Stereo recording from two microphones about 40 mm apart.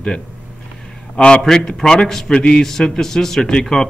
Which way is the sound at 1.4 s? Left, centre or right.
Centre.